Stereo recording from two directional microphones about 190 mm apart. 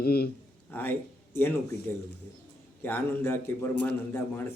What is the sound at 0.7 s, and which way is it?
Speech, 10° left (ahead or behind).